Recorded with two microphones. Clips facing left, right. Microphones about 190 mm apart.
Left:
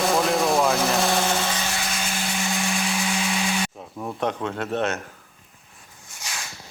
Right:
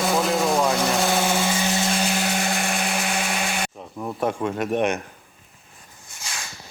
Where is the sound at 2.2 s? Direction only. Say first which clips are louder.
Right 3 dB; 60° right (ahead or behind).